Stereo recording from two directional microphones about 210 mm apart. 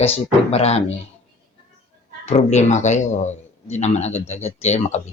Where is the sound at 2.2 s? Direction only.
30° left (ahead or behind).